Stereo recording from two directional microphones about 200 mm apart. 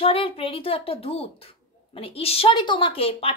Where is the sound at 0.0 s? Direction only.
30° left (ahead or behind).